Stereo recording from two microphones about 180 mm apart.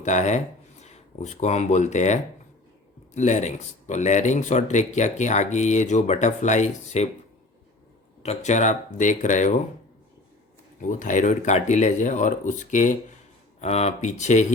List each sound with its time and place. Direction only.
0.0 s speech: 40° left (ahead or behind)
8.2 s speech: 40° left (ahead or behind)
10.8 s speech: 45° left (ahead or behind)